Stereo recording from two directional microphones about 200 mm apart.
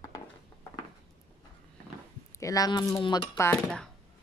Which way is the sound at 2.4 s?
20° left (ahead or behind).